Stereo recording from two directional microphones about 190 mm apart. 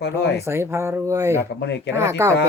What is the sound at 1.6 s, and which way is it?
Speech, 65° left (ahead or behind).